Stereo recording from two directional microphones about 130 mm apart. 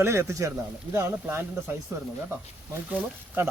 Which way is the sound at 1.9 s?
20° right (ahead or behind).